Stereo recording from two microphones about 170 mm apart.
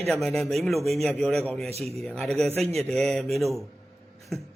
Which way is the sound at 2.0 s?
5° left (ahead or behind).